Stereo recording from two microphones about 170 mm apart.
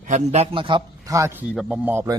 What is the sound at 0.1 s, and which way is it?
A man's voice, 40° right (ahead or behind).